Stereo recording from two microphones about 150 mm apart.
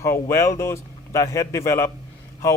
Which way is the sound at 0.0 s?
20° left (ahead or behind).